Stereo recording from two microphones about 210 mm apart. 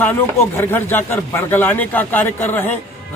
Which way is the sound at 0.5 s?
10° left (ahead or behind).